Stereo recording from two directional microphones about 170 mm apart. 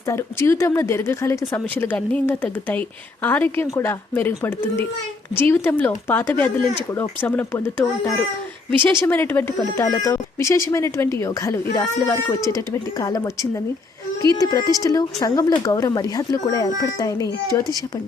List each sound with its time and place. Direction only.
0.1 s speech: 15° left (ahead or behind)
14.3 s speech: 20° left (ahead or behind)